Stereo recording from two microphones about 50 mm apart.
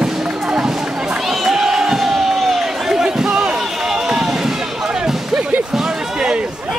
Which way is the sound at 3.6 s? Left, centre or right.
Centre.